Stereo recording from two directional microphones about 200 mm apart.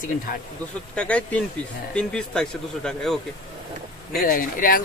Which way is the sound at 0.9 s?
5° left (ahead or behind).